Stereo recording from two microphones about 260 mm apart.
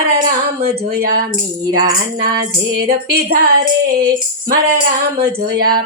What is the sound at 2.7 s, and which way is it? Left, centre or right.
Female singing, right.